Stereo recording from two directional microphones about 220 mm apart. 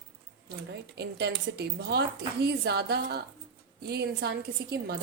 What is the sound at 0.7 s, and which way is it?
Speech, 50° right (ahead or behind).